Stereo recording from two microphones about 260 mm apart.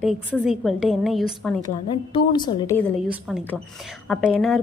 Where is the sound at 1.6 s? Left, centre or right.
Centre.